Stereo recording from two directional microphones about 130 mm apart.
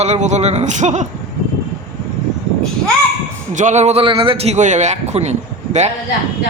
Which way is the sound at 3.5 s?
65° right (ahead or behind).